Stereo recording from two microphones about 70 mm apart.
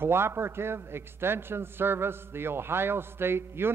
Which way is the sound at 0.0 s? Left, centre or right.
Right.